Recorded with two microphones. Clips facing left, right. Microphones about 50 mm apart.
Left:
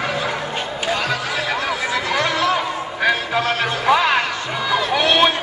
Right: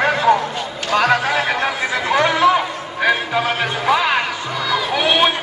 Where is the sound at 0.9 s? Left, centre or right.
Right.